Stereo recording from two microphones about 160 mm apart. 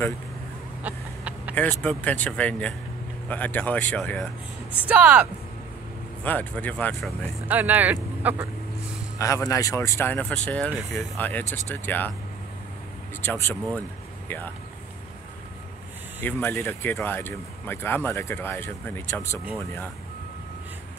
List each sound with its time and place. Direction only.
0.8 s chicken: 10° right (ahead or behind)
1.5 s speech: 10° left (ahead or behind)
4.7 s speech: 10° right (ahead or behind)
6.2 s speech: 10° left (ahead or behind)
7.4 s speech: 10° right (ahead or behind)
9.2 s speech: 20° left (ahead or behind)
13.2 s speech: 10° left (ahead or behind)
16.2 s speech: 10° left (ahead or behind)